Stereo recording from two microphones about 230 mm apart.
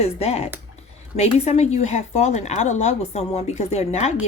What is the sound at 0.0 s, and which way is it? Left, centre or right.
Speech, left.